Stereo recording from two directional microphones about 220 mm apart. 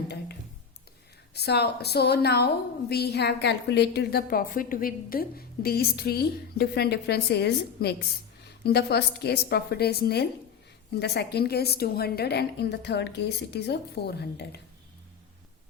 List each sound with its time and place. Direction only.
1.3 s a woman's voice: 50° left (ahead or behind)